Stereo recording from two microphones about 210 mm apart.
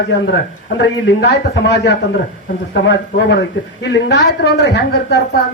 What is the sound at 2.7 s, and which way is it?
A man's voice, 50° left (ahead or behind).